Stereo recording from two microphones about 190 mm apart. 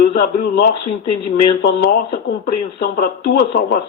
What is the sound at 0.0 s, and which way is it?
Speech, 50° left (ahead or behind).